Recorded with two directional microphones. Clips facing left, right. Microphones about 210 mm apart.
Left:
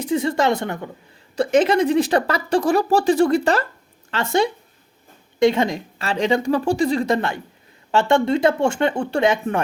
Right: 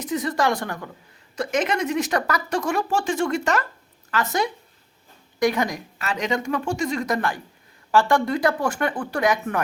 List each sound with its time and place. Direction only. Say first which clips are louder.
0.0 s a woman's voice: left 4 dB; 30° left (ahead or behind)